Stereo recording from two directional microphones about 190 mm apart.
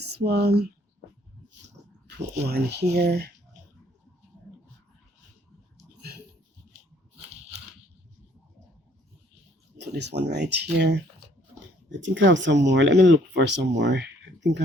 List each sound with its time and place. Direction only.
0.3 s speech: 60° right (ahead or behind)
2.0 s speech: 60° right (ahead or behind)
5.7 s a sound: 55° right (ahead or behind)
9.7 s speech: 65° right (ahead or behind)
11.9 s speech: 75° right (ahead or behind)